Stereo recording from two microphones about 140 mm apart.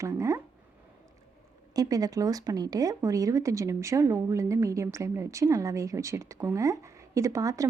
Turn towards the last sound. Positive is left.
turn(degrees=-25)  # may be behind; listen again after turning